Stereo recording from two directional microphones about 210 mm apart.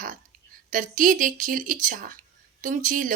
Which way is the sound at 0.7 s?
40° right (ahead or behind).